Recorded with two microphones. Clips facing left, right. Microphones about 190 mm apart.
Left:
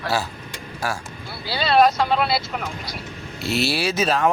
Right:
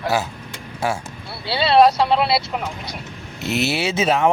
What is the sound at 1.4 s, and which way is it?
Speech, 30° right (ahead or behind).